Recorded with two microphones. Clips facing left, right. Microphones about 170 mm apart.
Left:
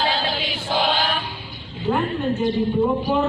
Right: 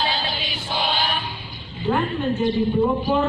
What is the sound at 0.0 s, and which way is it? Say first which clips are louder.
Choir: left 3 dB; 90° left.